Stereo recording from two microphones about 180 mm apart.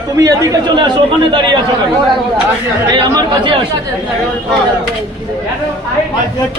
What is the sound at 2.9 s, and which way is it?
Speech, 25° right (ahead or behind).